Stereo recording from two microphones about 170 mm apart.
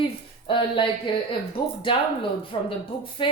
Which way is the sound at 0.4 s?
30° left (ahead or behind).